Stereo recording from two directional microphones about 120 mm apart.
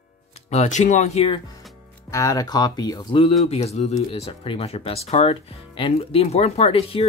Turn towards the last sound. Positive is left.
turn(degrees=55)  # may be behind; listen again after turning